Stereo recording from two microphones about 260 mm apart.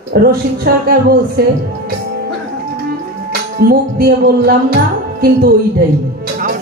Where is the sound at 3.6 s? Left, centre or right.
Right.